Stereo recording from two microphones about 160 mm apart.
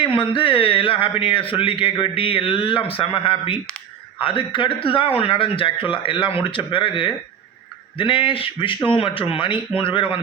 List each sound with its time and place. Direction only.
0.0 s speech: 30° left (ahead or behind)